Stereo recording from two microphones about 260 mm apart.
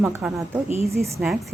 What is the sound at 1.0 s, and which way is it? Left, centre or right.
Speech, centre.